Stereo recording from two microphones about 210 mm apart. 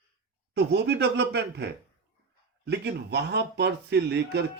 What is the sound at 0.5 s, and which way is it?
A man's voice, 50° right (ahead or behind).